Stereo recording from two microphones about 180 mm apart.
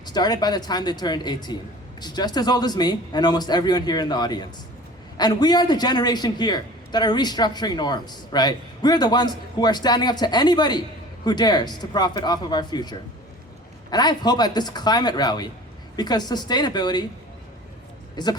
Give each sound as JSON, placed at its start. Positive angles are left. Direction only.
{"t": 0.0, "sound": "a man's voice", "side_deg": 20}
{"t": 18.2, "sound": "a man's voice", "side_deg": 20}